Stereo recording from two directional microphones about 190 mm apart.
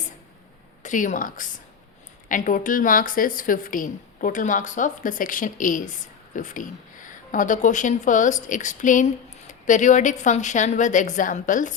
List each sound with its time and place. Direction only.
0.8 s a woman's voice: 40° left (ahead or behind)